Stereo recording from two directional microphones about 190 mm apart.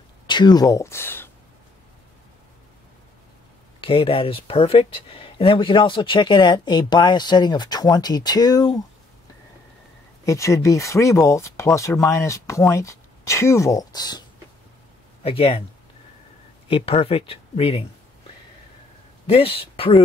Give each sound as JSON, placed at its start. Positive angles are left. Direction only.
{"t": 0.3, "sound": "speech", "side_deg": 25}
{"t": 3.8, "sound": "speech", "side_deg": 30}
{"t": 10.2, "sound": "speech", "side_deg": 15}
{"t": 15.2, "sound": "speech", "side_deg": 30}
{"t": 16.6, "sound": "speech", "side_deg": 30}
{"t": 19.2, "sound": "speech", "side_deg": 30}